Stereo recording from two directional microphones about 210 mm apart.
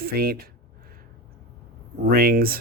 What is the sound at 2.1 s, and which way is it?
Speech, 45° right (ahead or behind).